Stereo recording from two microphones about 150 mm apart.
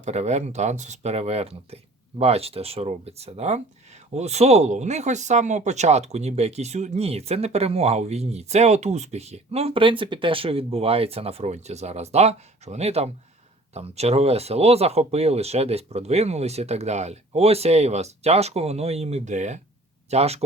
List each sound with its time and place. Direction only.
0.0 s speech: 50° right (ahead or behind)